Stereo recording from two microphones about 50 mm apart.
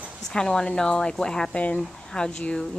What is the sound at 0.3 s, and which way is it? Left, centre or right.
A woman's voice, centre.